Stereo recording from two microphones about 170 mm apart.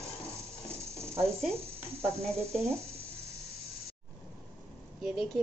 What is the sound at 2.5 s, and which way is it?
Speech, 15° right (ahead or behind).